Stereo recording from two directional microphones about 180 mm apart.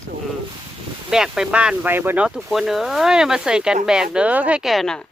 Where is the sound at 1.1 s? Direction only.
5° right (ahead or behind).